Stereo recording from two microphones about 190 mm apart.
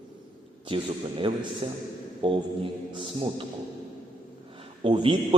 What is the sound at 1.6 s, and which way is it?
A man's voice, 30° right (ahead or behind).